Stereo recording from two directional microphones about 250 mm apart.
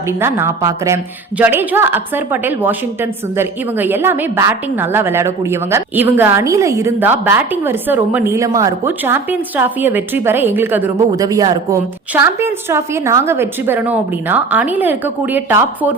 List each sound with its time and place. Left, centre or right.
0.2 s a woman's voice: centre